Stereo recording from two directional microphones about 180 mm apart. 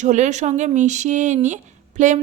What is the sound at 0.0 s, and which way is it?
A woman's voice, 40° right (ahead or behind).